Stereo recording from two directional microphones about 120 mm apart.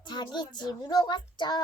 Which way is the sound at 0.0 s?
40° left (ahead or behind).